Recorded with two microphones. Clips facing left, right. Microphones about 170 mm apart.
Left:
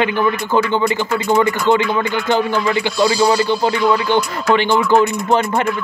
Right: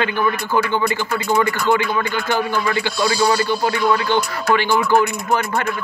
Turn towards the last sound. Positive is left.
turn(degrees=20)  # may be behind; listen again after turning